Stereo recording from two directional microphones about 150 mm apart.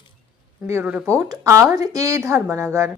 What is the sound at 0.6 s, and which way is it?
Speech, 15° right (ahead or behind).